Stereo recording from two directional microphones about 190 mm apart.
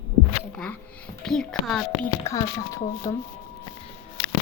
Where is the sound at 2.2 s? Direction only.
15° left (ahead or behind).